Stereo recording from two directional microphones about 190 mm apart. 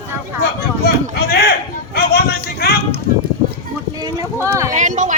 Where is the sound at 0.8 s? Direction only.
55° left (ahead or behind).